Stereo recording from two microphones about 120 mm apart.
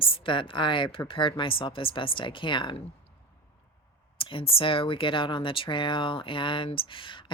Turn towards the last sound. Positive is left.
turn(degrees=45)  # may be behind; listen again after turning